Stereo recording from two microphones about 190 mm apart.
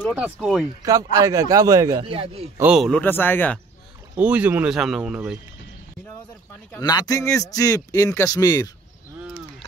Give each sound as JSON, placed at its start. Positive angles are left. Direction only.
{"t": 0.1, "sound": "speech", "side_deg": -5}
{"t": 1.1, "sound": "speech", "side_deg": -20}
{"t": 2.0, "sound": "speech", "side_deg": -30}
{"t": 2.5, "sound": "speech", "side_deg": -5}
{"t": 4.2, "sound": "speech", "side_deg": -5}
{"t": 6.8, "sound": "speech", "side_deg": 20}